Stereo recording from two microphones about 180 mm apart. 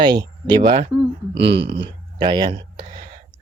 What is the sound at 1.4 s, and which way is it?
Speech, 75° right (ahead or behind).